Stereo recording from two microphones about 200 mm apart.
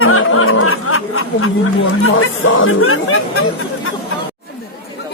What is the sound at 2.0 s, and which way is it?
Speech, 80° left.